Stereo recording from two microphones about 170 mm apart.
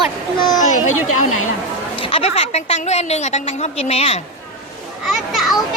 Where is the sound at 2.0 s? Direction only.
35° left (ahead or behind).